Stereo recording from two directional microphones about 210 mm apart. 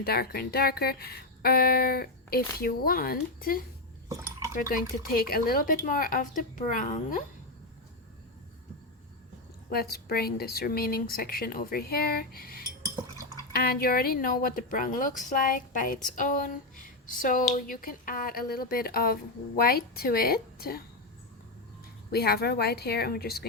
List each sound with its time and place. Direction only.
0.0 s speech: 45° left (ahead or behind)
9.6 s speech: 45° left (ahead or behind)
22.1 s speech: 50° left (ahead or behind)